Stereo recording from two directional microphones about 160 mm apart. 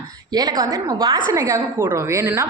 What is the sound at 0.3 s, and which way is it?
A woman's voice, 25° right (ahead or behind).